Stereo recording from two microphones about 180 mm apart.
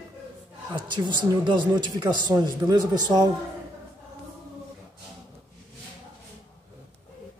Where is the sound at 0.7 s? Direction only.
25° right (ahead or behind).